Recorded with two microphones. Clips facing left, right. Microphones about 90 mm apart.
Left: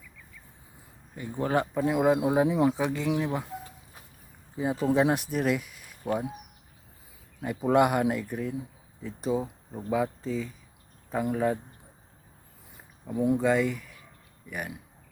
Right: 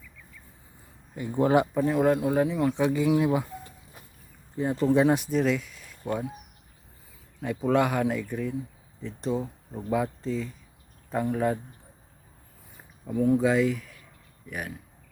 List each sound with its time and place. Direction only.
1.1 s speech: 10° right (ahead or behind)
1.8 s speech: 10° left (ahead or behind)
2.7 s speech: centre (ahead or behind); by 6.3 s 15° left (ahead or behind)
7.4 s speech: 15° left (ahead or behind)
13.1 s speech: 10° left (ahead or behind)